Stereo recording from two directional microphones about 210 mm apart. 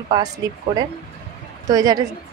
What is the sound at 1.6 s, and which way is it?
Speech, 15° right (ahead or behind).